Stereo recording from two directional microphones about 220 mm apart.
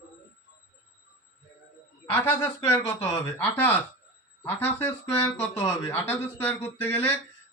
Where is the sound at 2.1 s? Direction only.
10° left (ahead or behind).